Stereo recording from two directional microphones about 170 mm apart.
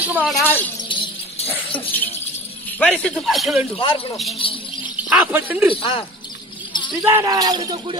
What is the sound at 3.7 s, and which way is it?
Speech, 30° left (ahead or behind).